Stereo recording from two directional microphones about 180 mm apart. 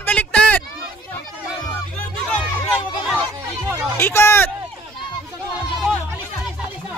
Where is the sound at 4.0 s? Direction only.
15° left (ahead or behind).